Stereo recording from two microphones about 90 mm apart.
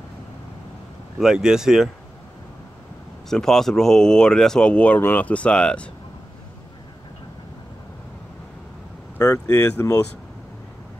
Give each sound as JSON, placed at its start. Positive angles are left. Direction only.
{"t": 1.2, "sound": "speech", "side_deg": -5}
{"t": 3.3, "sound": "speech", "side_deg": 5}
{"t": 9.5, "sound": "speech", "side_deg": 30}